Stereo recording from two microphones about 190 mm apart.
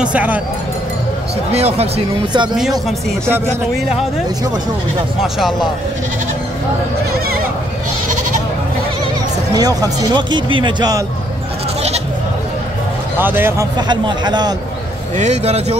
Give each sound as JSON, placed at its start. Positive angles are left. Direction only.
{"t": 0.0, "sound": "speech", "side_deg": -10}
{"t": 1.5, "sound": "speech", "side_deg": -30}
{"t": 9.5, "sound": "speech", "side_deg": -20}
{"t": 13.2, "sound": "speech", "side_deg": -10}
{"t": 15.1, "sound": "speech", "side_deg": -35}